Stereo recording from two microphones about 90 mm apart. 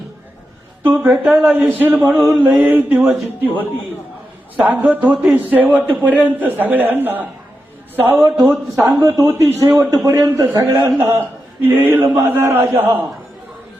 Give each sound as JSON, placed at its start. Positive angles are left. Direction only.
{"t": 0.9, "sound": "a man's voice", "side_deg": -15}
{"t": 4.5, "sound": "a man's voice", "side_deg": -15}
{"t": 9.0, "sound": "a man's voice", "side_deg": -35}
{"t": 11.6, "sound": "a man's voice", "side_deg": -20}